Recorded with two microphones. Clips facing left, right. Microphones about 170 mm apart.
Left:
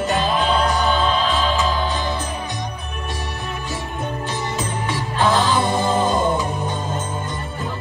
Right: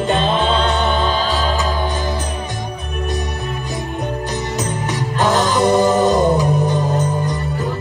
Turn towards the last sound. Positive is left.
turn(degrees=-40)  # may be behind; listen again after turning